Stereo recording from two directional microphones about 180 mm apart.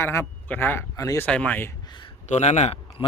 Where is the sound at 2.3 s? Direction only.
40° left (ahead or behind).